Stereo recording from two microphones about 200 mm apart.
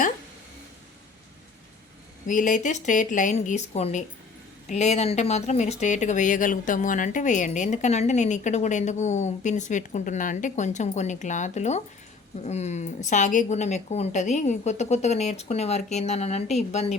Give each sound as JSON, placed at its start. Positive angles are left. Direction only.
{"t": 2.2, "sound": "speech", "side_deg": 40}